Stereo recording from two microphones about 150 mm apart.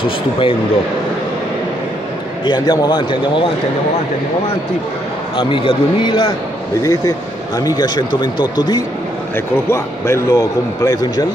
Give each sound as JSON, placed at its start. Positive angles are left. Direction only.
{"t": 0.0, "sound": "a man's voice", "side_deg": 35}
{"t": 2.4, "sound": "a man's voice", "side_deg": 30}
{"t": 5.4, "sound": "a man's voice", "side_deg": 35}
{"t": 6.8, "sound": "a man's voice", "side_deg": 20}